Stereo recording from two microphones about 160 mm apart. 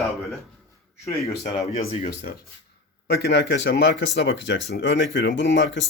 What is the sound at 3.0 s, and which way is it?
Speech, 90° left.